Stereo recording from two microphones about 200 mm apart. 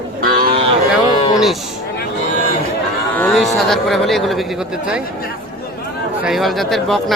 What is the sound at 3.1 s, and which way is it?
Speech, 5° left (ahead or behind).